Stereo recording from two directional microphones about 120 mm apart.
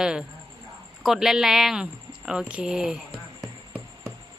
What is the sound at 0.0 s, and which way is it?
Speech, 5° right (ahead or behind).